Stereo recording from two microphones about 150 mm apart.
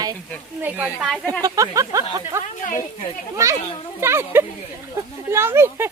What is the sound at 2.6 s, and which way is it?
Speech, 60° left (ahead or behind).